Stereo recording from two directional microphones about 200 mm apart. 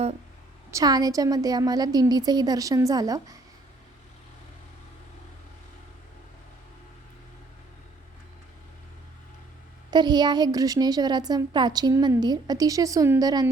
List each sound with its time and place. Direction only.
0.7 s a woman's voice: 20° right (ahead or behind)
9.9 s a woman's voice: 20° right (ahead or behind)